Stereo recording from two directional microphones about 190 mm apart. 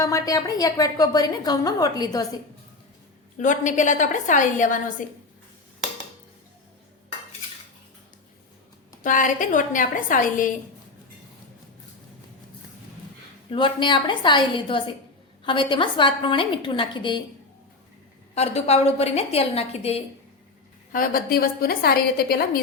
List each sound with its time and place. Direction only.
0.0 s a woman's voice: 20° left (ahead or behind)
3.3 s a woman's voice: 40° left (ahead or behind)
9.0 s a woman's voice: 45° left (ahead or behind)
13.5 s a woman's voice: 25° left (ahead or behind)
18.3 s a woman's voice: 35° left (ahead or behind)
20.9 s a woman's voice: 50° left (ahead or behind)